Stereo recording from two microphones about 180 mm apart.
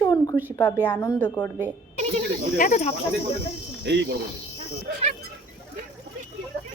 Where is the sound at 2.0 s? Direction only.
35° right (ahead or behind).